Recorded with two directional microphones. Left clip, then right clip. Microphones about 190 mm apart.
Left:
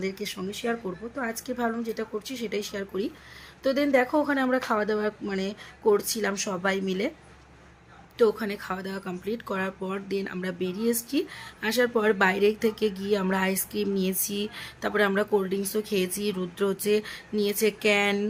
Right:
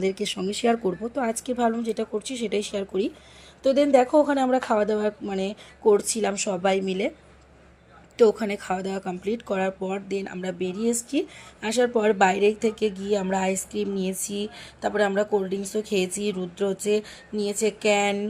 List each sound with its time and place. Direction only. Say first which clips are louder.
0.0 s a woman's voice: right 6 dB; 15° right (ahead or behind)
8.2 s speech: right 4 dB; 20° right (ahead or behind); by 18.2 s centre (ahead or behind)